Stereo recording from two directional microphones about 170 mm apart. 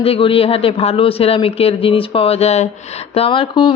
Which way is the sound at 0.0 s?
35° left (ahead or behind).